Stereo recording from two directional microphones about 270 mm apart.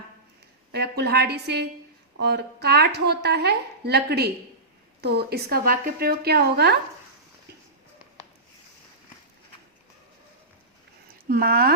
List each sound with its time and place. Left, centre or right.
0.7 s a woman's voice: right
11.3 s a woman's voice: right